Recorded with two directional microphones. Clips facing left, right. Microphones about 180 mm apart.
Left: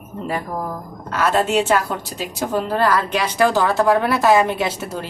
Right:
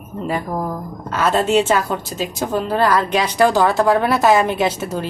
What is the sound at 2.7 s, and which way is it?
A woman's voice, 15° right (ahead or behind).